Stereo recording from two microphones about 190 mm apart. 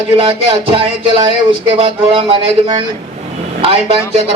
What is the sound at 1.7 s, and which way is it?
A man's voice, 30° right (ahead or behind).